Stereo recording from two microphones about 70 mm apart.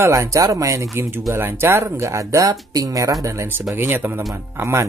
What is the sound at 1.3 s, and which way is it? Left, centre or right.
Speech, right.